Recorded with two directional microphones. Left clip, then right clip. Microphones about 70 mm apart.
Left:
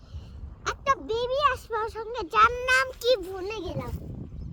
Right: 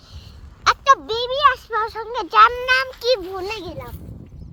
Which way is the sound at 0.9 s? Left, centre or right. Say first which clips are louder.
Right 5 dB; left.